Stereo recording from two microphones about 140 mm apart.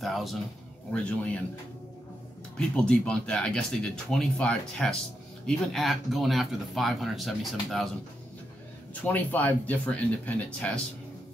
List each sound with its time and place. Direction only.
0.0 s speech: centre (ahead or behind)
0.9 s speech: 10° left (ahead or behind)
2.5 s speech: 10° left (ahead or behind)
9.0 s speech: 10° left (ahead or behind)